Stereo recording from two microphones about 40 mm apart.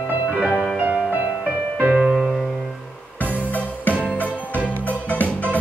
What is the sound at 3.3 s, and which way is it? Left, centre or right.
Music, left.